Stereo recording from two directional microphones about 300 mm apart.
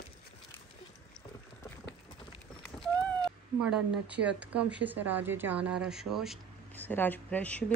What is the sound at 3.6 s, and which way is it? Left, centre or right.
Speech, centre.